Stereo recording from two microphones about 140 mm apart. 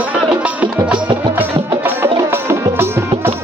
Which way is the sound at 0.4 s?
10° right (ahead or behind).